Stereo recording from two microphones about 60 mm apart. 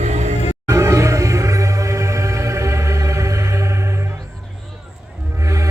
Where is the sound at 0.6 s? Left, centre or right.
Right.